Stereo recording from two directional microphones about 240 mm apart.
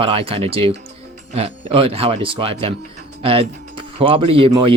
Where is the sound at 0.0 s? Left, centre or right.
Right.